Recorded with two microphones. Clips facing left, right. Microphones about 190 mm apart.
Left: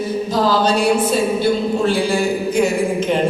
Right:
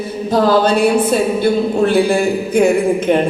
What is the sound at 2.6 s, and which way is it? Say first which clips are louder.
Mantra: right 6 dB; 55° right (ahead or behind).